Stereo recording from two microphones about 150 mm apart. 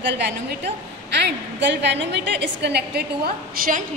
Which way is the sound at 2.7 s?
90° right.